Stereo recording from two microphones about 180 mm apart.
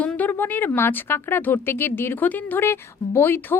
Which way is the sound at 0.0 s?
10° left (ahead or behind).